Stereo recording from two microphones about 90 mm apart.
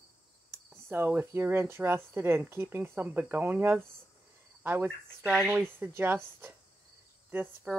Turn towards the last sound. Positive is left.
turn(degrees=-25)  # may be behind; listen again after turning